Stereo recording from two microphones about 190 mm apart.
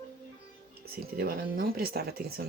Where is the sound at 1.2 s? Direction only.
50° right (ahead or behind).